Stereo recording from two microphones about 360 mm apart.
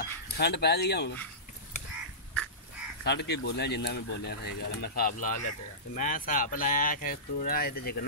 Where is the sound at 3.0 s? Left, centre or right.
Left.